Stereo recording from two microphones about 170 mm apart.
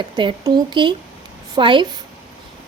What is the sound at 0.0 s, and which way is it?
A woman's voice, 30° right (ahead or behind).